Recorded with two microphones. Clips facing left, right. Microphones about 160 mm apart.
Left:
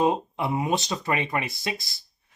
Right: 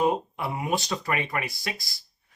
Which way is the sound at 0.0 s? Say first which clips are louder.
Left 2 dB; 25° left (ahead or behind).